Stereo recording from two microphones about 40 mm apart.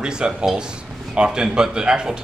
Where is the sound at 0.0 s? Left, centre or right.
Right.